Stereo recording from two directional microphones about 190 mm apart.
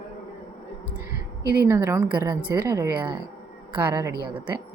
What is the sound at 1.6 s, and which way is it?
A woman's voice, 15° right (ahead or behind).